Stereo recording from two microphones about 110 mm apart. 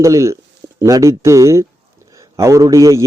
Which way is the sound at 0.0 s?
30° right (ahead or behind).